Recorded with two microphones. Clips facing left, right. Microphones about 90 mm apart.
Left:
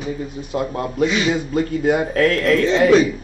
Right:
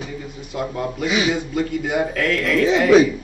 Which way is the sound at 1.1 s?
5° right (ahead or behind).